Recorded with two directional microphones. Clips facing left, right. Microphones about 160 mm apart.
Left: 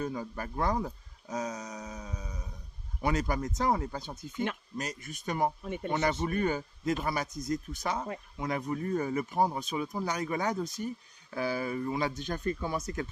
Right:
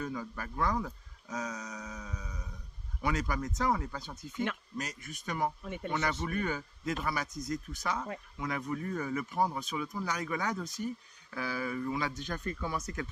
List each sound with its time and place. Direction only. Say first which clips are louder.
0.0 s speech: left 3 dB; 30° left (ahead or behind)